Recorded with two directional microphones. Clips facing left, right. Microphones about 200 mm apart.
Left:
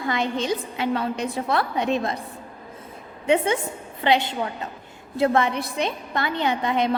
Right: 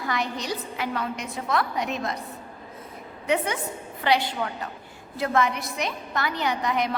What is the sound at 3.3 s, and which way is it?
A woman's voice, 25° left (ahead or behind).